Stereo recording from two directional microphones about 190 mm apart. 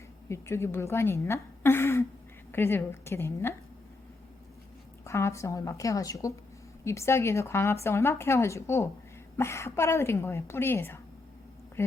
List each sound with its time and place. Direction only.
0.3 s speech: 15° left (ahead or behind)
5.0 s speech: 15° left (ahead or behind)